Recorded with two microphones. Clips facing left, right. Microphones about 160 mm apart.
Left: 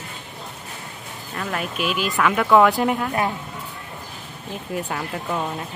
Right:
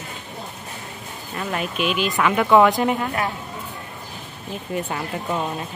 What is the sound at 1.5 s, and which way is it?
Speech, centre (ahead or behind).